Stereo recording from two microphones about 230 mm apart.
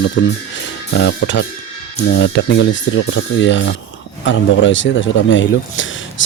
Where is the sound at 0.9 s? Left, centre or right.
Left.